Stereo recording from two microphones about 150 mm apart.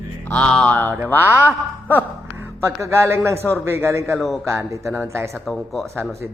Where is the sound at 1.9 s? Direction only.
15° right (ahead or behind).